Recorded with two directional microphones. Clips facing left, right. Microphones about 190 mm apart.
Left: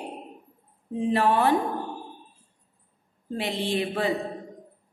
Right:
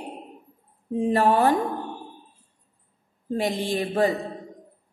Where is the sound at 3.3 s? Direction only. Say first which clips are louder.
Right 2 dB; 45° right (ahead or behind).